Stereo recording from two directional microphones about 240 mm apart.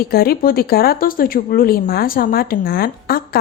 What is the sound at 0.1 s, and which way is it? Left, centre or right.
Speech, left.